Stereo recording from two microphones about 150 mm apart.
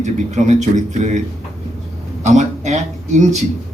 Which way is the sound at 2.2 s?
50° right (ahead or behind).